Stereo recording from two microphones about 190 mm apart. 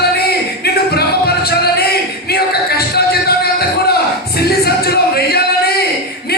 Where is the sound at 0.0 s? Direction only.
55° left (ahead or behind).